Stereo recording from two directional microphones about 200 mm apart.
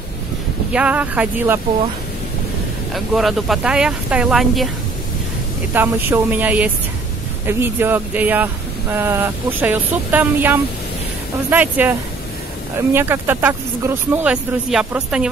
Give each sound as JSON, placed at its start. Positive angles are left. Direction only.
{"t": 0.7, "sound": "speech", "side_deg": -5}
{"t": 2.9, "sound": "speech", "side_deg": 0}
{"t": 5.7, "sound": "speech", "side_deg": -10}